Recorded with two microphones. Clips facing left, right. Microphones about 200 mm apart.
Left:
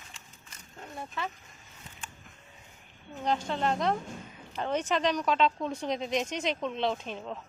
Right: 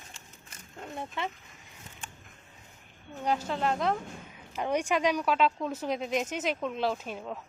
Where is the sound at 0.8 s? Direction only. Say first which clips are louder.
Right 2 dB; 25° right (ahead or behind).